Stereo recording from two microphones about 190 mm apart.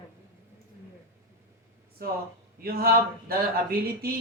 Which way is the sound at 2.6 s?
50° right (ahead or behind).